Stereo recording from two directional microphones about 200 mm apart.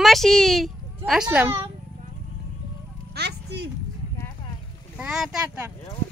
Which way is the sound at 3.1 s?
55° right (ahead or behind).